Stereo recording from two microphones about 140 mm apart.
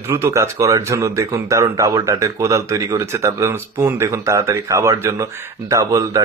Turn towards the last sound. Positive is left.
turn(degrees=-25)  # may be behind; listen again after turning